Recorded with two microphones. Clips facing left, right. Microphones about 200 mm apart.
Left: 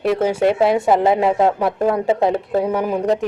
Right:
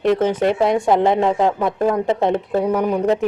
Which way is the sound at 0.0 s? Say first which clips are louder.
Even; 10° left (ahead or behind).